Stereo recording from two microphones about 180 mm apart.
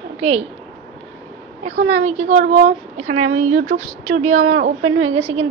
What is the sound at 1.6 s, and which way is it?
A woman's voice, 40° right (ahead or behind).